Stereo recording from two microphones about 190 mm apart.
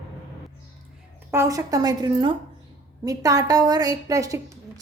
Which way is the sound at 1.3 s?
15° right (ahead or behind).